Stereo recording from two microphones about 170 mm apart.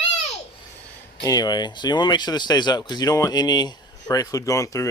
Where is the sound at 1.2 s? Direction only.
25° left (ahead or behind).